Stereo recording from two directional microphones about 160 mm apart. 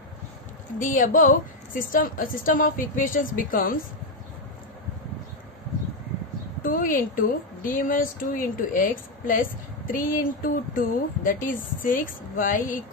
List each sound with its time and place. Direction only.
0.7 s a woman's voice: 55° left (ahead or behind)
6.6 s a woman's voice: 60° left (ahead or behind)